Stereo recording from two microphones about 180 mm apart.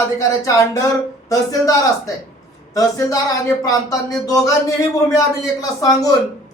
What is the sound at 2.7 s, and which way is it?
A man's voice, 20° left (ahead or behind).